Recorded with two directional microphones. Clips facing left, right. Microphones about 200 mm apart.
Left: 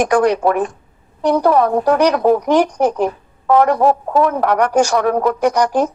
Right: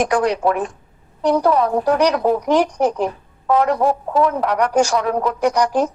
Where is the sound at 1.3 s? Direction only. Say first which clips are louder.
Left 2 dB; 60° left (ahead or behind).